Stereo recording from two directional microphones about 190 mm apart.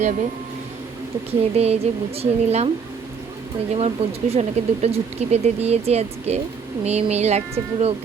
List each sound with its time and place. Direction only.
1.3 s speech: 35° right (ahead or behind)
3.8 s speech: 30° right (ahead or behind)